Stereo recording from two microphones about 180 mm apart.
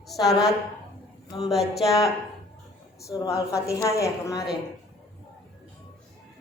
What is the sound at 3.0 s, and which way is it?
A woman's voice, 20° left (ahead or behind).